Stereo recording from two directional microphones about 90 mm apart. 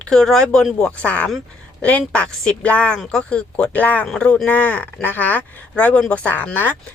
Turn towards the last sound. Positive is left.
turn(degrees=20)  # may be behind; listen again after turning